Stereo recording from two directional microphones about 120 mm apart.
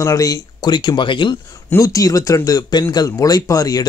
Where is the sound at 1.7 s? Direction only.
30° left (ahead or behind).